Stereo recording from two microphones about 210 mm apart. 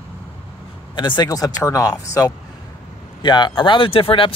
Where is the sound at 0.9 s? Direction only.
20° left (ahead or behind).